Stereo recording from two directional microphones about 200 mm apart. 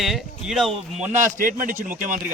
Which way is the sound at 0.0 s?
Centre (ahead or behind).